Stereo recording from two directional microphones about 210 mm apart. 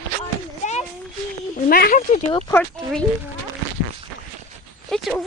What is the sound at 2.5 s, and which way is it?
Speech, 10° left (ahead or behind).